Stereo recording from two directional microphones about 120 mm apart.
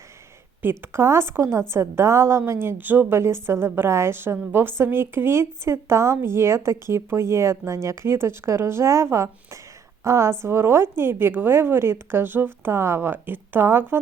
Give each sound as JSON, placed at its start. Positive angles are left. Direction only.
{"t": 0.6, "sound": "speech", "side_deg": -20}